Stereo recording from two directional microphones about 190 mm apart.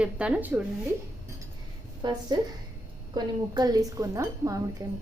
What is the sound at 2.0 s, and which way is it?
A woman's voice, 20° right (ahead or behind).